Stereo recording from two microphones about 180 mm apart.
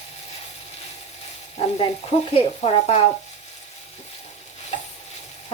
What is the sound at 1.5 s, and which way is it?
Stir, 35° left (ahead or behind).